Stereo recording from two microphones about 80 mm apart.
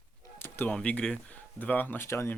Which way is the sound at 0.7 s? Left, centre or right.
Centre.